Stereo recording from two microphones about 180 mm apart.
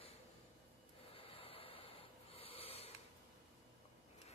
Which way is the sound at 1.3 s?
30° left (ahead or behind).